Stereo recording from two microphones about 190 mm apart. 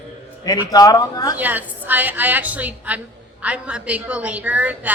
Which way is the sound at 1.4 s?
10° right (ahead or behind).